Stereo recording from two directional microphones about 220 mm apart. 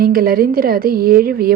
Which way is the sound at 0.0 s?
40° right (ahead or behind).